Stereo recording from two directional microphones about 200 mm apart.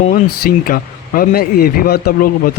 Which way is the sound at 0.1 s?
45° left (ahead or behind).